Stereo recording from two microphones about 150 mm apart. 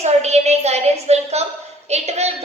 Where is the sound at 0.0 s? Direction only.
45° right (ahead or behind).